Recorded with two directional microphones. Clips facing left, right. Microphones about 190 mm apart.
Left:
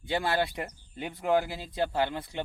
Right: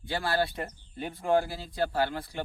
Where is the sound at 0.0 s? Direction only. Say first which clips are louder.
Left 1 dB; 20° left (ahead or behind).